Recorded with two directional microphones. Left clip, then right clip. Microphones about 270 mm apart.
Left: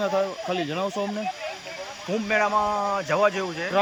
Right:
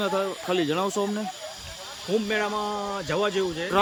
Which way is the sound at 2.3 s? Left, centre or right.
Centre.